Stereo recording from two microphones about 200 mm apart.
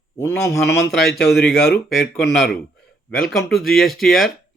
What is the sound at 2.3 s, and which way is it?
Speech, centre (ahead or behind).